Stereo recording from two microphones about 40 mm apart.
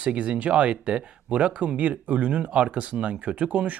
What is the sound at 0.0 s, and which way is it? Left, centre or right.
Speech, right.